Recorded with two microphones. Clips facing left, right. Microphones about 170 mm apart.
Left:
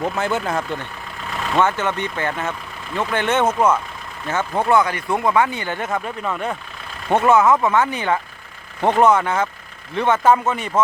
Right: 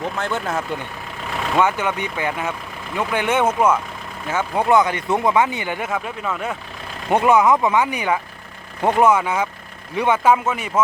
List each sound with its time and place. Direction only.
0.2 s speech: 5° left (ahead or behind)
1.5 s speech: 10° right (ahead or behind)
7.1 s speech: 15° right (ahead or behind)